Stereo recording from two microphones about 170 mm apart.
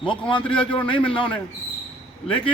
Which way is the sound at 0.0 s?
30° left (ahead or behind).